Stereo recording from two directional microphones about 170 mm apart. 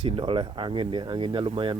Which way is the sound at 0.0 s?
35° right (ahead or behind).